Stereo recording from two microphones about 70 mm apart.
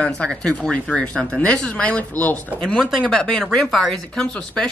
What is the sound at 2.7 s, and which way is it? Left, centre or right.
Speech, centre.